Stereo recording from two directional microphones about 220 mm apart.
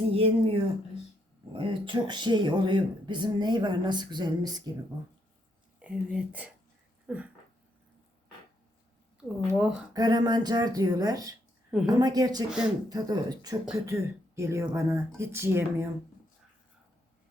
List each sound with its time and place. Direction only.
0.1 s speech: 25° right (ahead or behind)
5.8 s speech: 5° right (ahead or behind)
7.1 s a sound: 5° right (ahead or behind)
9.6 s speech: 5° right (ahead or behind)
9.9 s speech: 20° right (ahead or behind)
11.7 s a woman's voice: 5° right (ahead or behind)
11.9 s speech: 15° right (ahead or behind)
12.5 s speech: 5° right (ahead or behind)
12.9 s speech: 15° right (ahead or behind)